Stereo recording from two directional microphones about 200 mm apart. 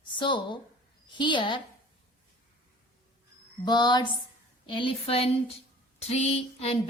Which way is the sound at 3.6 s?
20° left (ahead or behind).